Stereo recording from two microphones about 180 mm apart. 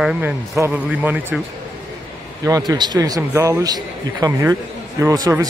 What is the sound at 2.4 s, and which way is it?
A man's voice, 20° right (ahead or behind).